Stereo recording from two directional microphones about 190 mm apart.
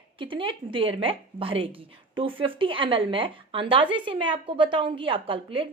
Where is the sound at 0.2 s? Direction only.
25° right (ahead or behind).